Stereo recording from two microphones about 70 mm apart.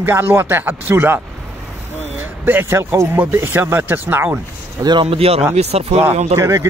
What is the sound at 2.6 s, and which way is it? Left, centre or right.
A man's voice, right.